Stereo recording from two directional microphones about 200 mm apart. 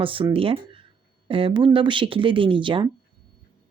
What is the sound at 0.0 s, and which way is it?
Speech, 25° right (ahead or behind).